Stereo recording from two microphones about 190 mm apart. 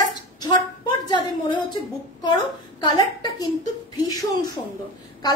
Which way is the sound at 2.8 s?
20° left (ahead or behind).